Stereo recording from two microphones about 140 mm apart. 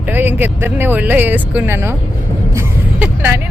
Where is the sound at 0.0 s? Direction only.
15° right (ahead or behind).